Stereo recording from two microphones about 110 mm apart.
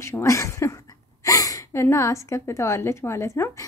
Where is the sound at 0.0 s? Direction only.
25° left (ahead or behind).